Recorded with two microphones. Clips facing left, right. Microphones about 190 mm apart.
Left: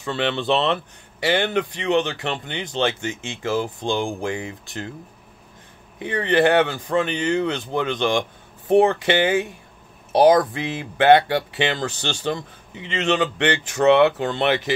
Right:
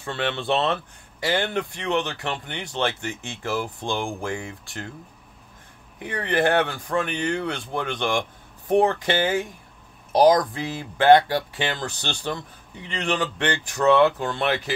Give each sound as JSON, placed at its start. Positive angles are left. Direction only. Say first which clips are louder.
{"t": 0.0, "sound": "speech", "louder": "left 4 dB", "side_deg": 20}
{"t": 5.9, "sound": "speech", "louder": "left 5 dB", "side_deg": 20}
{"t": 10.5, "sound": "speech", "louder": "left 3 dB", "side_deg": 20}